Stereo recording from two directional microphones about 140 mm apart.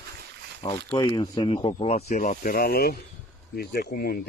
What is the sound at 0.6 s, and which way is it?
Speech, 25° left (ahead or behind).